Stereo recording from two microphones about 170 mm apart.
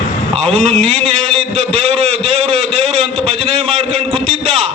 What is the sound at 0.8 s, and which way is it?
Speech, 35° right (ahead or behind).